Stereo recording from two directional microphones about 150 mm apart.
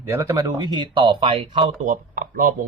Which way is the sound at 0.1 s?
20° right (ahead or behind).